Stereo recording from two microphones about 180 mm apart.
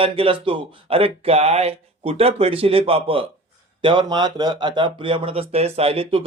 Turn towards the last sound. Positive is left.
turn(degrees=-30)  # may be behind; listen again after turning